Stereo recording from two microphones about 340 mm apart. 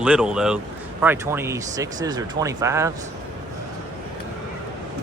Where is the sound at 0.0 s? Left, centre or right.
Centre.